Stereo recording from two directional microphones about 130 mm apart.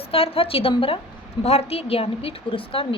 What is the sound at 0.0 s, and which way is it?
A woman's voice, 50° left (ahead or behind).